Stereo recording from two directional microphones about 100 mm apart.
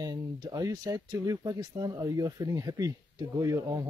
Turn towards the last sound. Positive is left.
turn(degrees=-35)  # may be behind; listen again after turning